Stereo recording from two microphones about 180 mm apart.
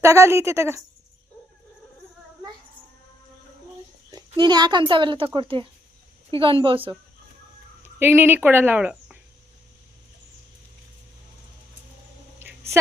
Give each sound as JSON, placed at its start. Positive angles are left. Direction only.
{"t": 0.0, "sound": "a woman's voice", "side_deg": -15}
{"t": 4.1, "sound": "a child's voice", "side_deg": -25}
{"t": 7.8, "sound": "speech", "side_deg": -15}
{"t": 12.4, "sound": "a sound", "side_deg": -10}